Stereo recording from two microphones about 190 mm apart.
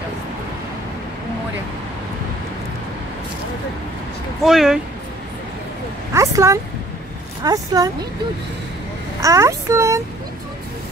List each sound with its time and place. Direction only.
4.5 s speech: centre (ahead or behind)
6.1 s speech: 15° right (ahead or behind)
9.2 s speech: 15° right (ahead or behind)